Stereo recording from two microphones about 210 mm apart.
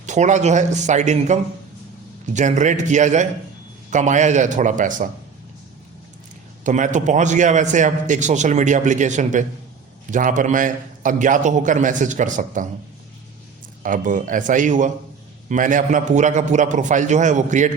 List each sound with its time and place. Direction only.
0.0 s a man's voice: 35° right (ahead or behind)
6.7 s a man's voice: 35° right (ahead or behind)
13.8 s a man's voice: 40° right (ahead or behind)